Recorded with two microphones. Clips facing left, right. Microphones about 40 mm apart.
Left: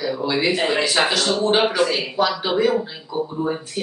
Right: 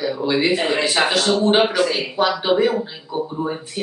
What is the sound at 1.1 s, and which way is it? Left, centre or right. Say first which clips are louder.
Speech: right 2 dB; centre.